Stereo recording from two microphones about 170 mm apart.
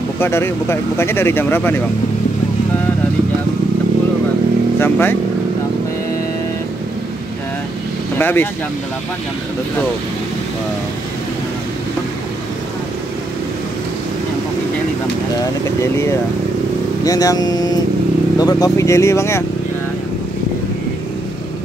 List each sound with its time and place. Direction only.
0.2 s speech: 15° left (ahead or behind)
4.7 s speech: 10° left (ahead or behind)
8.2 s speech: 10° left (ahead or behind)
17.0 s speech: 20° left (ahead or behind)